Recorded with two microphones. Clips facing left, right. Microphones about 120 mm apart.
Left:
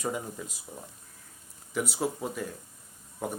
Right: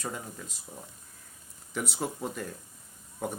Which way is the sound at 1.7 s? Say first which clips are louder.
Left 3 dB; 5° left (ahead or behind).